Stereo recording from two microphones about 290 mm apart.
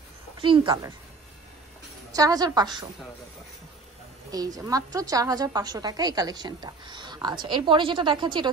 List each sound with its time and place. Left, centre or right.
0.4 s a woman's voice: centre
2.1 s a woman's voice: centre
4.3 s a woman's voice: centre